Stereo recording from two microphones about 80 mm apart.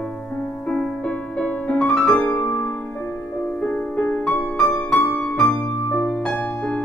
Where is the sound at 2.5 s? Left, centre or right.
Left.